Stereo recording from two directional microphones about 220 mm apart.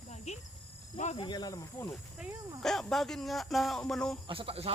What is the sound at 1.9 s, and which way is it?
Speech, centre (ahead or behind).